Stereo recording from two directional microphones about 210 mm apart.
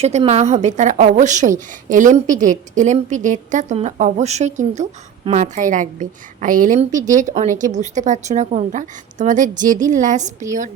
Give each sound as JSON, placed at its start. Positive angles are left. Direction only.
{"t": 0.0, "sound": "a woman's voice", "side_deg": -30}